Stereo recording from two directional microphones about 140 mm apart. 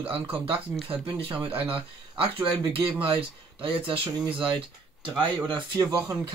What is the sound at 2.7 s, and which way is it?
Speech, 40° right (ahead or behind).